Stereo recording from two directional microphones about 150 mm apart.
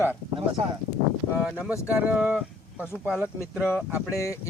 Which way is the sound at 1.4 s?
5° right (ahead or behind).